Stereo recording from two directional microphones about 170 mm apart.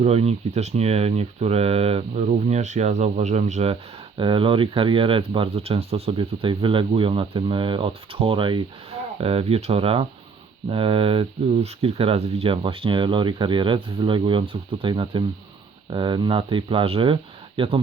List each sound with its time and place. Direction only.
0.0 s speech: 35° right (ahead or behind)
4.2 s speech: 30° right (ahead or behind)